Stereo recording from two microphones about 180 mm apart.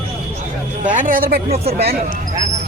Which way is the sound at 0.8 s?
45° right (ahead or behind).